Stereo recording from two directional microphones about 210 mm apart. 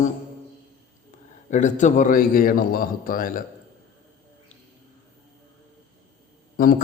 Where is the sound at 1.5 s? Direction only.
35° left (ahead or behind).